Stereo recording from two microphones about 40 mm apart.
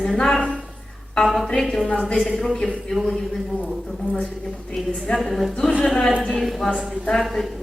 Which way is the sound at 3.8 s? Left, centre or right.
Centre.